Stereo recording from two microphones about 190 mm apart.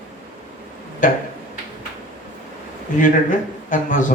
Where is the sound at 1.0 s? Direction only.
40° left (ahead or behind).